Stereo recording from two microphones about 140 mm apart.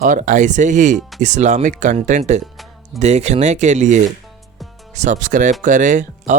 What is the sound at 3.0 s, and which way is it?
Speech, 55° right (ahead or behind).